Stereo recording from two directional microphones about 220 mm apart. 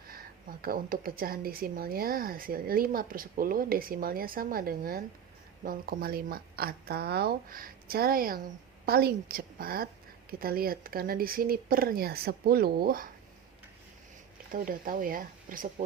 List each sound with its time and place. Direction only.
0.6 s a woman's voice: 40° right (ahead or behind)
14.5 s speech: 40° right (ahead or behind)